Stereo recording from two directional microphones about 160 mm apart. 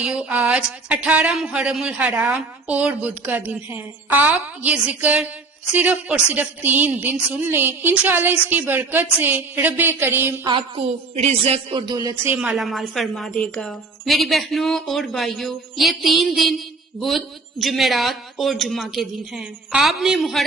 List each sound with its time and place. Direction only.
0.0 s speech: 5° right (ahead or behind)
10.4 s a woman's voice: 35° right (ahead or behind)
12.2 s speech: 15° right (ahead or behind)
12.5 s a woman's voice: centre (ahead or behind)